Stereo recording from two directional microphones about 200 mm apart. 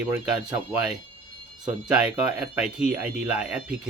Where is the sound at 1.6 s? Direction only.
5° right (ahead or behind).